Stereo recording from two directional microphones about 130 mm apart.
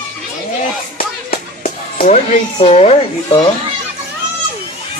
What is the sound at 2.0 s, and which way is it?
Speech, 55° left (ahead or behind).